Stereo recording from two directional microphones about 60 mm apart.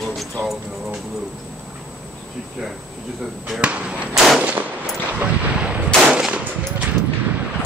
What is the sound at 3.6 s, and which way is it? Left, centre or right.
Speech, centre.